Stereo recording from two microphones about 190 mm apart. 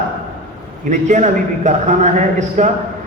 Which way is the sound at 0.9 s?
40° right (ahead or behind).